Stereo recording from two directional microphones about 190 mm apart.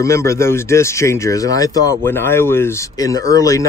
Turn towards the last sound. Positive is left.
turn(degrees=15)  # may be behind; listen again after turning